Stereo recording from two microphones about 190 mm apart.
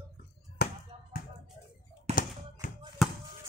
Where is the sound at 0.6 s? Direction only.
55° left (ahead or behind).